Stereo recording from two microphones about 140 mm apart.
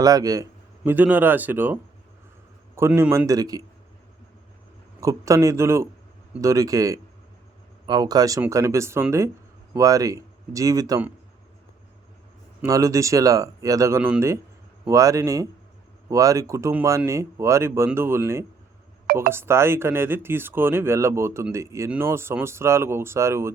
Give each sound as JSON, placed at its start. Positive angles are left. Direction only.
{"t": 0.0, "sound": "speech", "side_deg": -25}
{"t": 0.9, "sound": "speech", "side_deg": -15}
{"t": 4.9, "sound": "speech", "side_deg": -20}
{"t": 12.6, "sound": "speech", "side_deg": -25}